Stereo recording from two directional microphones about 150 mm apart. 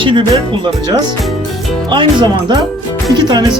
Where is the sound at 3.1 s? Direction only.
30° right (ahead or behind).